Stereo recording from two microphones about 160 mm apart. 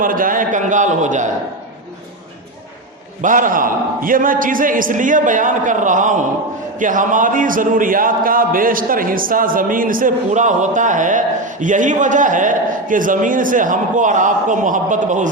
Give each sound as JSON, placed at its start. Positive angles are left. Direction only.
{"t": 0.0, "sound": "a man's voice", "side_deg": -60}
{"t": 3.2, "sound": "speech", "side_deg": -55}